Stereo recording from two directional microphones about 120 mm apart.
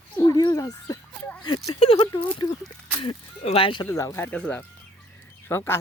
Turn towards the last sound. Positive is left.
turn(degrees=20)  # may be behind; listen again after turning